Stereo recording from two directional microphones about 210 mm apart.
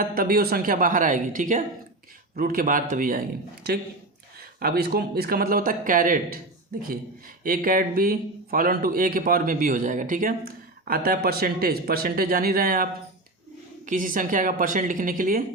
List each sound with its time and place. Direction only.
0.0 s a woman's voice: 45° right (ahead or behind)
7.4 s a man's voice: 45° right (ahead or behind)